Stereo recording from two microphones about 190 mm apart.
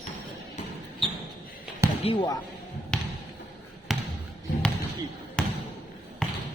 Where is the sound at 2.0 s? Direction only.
25° left (ahead or behind).